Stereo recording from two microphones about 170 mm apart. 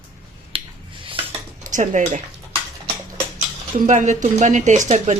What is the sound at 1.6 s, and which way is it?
Speech, 45° right (ahead or behind).